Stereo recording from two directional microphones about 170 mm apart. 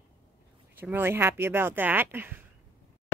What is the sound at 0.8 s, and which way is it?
Speech, 10° right (ahead or behind).